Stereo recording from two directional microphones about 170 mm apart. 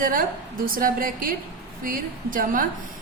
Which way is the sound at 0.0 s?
55° right (ahead or behind).